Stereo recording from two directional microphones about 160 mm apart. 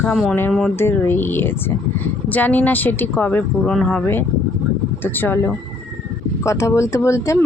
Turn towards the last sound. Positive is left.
turn(degrees=20)  # may be behind; listen again after turning